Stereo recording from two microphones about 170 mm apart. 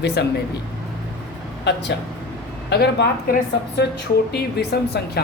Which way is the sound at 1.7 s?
90° left.